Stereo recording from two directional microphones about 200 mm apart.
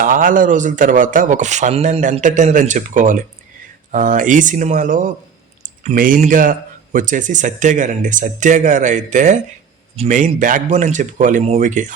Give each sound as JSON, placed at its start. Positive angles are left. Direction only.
{"t": 0.0, "sound": "a man's voice", "side_deg": -45}